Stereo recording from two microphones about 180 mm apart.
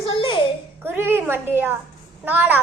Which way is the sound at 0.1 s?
25° left (ahead or behind).